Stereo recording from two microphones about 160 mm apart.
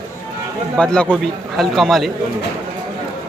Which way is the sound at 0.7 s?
5° left (ahead or behind).